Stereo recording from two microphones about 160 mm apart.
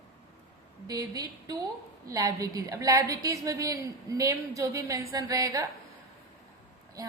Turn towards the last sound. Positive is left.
turn(degrees=-20)  # may be behind; listen again after turning